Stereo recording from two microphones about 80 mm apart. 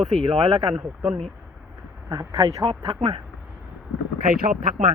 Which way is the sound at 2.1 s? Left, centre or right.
Right.